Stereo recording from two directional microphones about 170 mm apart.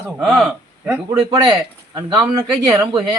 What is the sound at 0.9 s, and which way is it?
Speech, 25° right (ahead or behind).